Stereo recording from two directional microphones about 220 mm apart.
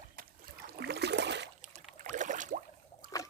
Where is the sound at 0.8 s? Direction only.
50° right (ahead or behind).